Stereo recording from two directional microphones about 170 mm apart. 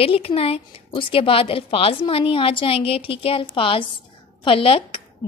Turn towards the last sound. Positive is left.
turn(degrees=30)  # may be behind; listen again after turning